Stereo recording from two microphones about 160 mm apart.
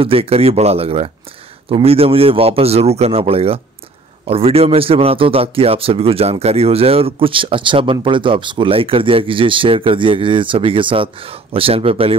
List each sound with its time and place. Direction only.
0.0 s speech: 35° right (ahead or behind)